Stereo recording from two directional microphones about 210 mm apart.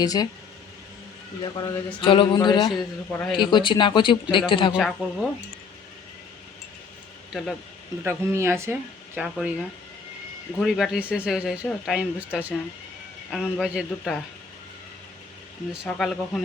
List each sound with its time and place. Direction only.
0.0 s speech: 20° left (ahead or behind)
1.4 s speech: 20° left (ahead or behind)
4.7 s speech: centre (ahead or behind)
8.0 s speech: 10° right (ahead or behind)
15.7 s speech: centre (ahead or behind)